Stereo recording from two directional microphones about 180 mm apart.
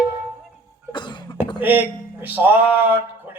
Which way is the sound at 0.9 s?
25° left (ahead or behind).